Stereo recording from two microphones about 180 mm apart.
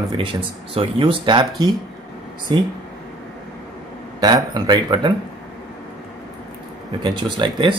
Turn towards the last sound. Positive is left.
turn(degrees=-25)  # may be behind; listen again after turning